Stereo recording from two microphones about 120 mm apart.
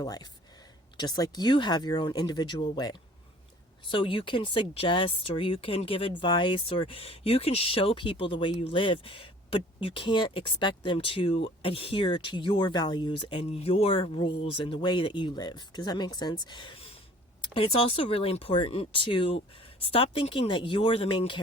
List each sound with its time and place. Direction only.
0.0 s speech: 35° left (ahead or behind)